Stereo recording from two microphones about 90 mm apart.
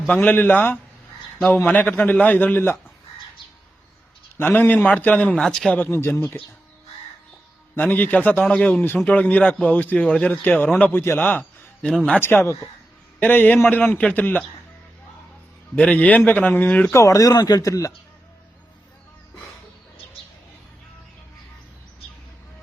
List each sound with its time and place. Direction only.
0.1 s a man's voice: 15° left (ahead or behind)
4.4 s a man's voice: 20° left (ahead or behind)
5.4 s a man's voice: 5° left (ahead or behind)
5.7 s a man's voice: 25° left (ahead or behind)
7.8 s a man's voice: 20° left (ahead or behind)
11.8 s a man's voice: 10° left (ahead or behind)
12.2 s a man's voice: 25° left (ahead or behind)
15.7 s a man's voice: 15° left (ahead or behind)
16.9 s speech: 35° left (ahead or behind)